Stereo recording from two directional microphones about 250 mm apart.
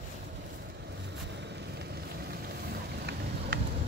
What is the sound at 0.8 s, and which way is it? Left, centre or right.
Vehicle, right.